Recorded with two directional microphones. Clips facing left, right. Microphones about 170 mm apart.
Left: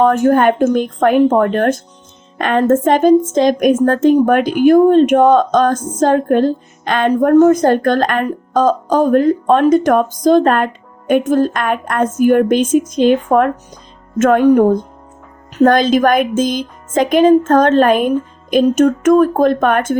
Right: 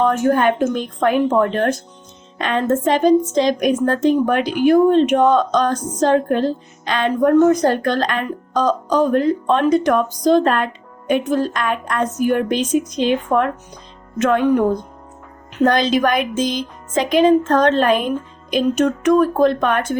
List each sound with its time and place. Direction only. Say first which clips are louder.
0.0 s a woman's voice: left 5 dB; 45° left (ahead or behind)